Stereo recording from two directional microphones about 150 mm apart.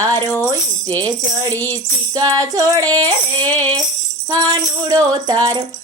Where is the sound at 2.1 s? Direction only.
25° right (ahead or behind).